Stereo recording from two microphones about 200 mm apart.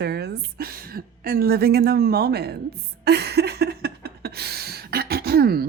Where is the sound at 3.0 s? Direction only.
55° right (ahead or behind).